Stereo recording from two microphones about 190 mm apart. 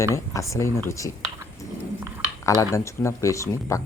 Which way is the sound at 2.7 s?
15° left (ahead or behind).